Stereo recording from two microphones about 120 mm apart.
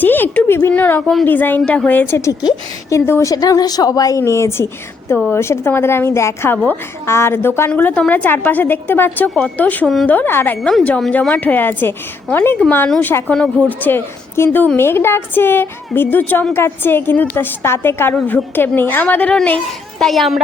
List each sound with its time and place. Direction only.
0.0 s a sound: 15° left (ahead or behind)
0.7 s a woman's voice: 15° left (ahead or behind)
2.4 s a woman's voice: 35° left (ahead or behind); by 9.8 s 15° left (ahead or behind)
9.8 s a child's voice: centre (ahead or behind)
10.1 s a woman's voice: 15° left (ahead or behind)
20.0 s a child's voice: centre (ahead or behind)